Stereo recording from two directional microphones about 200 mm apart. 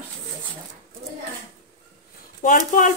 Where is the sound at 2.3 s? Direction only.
40° left (ahead or behind).